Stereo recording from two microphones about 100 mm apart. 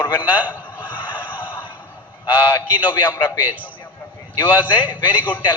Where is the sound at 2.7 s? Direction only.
15° right (ahead or behind).